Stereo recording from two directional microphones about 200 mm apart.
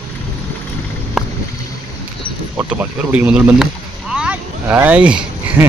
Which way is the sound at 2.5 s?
10° right (ahead or behind).